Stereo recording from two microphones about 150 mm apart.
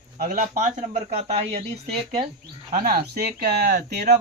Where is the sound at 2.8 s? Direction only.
80° right.